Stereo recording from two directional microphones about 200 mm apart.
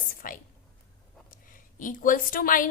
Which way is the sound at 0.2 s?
40° left (ahead or behind).